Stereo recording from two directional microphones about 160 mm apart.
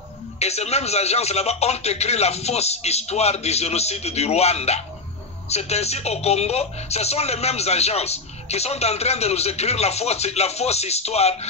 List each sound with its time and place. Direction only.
0.4 s speech: 40° left (ahead or behind)